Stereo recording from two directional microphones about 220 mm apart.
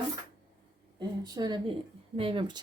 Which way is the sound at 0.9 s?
20° right (ahead or behind).